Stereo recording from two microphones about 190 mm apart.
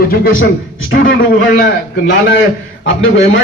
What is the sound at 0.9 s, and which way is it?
Speech, 85° left.